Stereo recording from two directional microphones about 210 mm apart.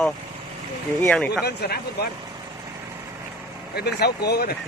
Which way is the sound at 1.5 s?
50° left (ahead or behind).